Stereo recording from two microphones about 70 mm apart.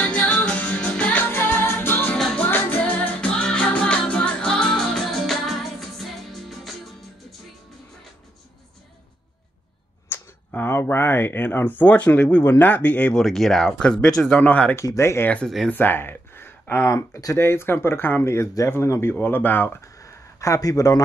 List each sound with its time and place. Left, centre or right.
0.0 s music: centre
10.0 s a sound: left
12.5 s speech: left
13.2 s speech: centre; by 14.8 s left
15.0 s speech: left
15.4 s speech: centre
15.7 s speech: left
17.4 s speech: left
19.8 s a sound: left